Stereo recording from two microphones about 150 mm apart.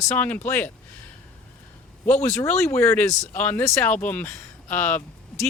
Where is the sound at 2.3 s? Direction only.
15° left (ahead or behind).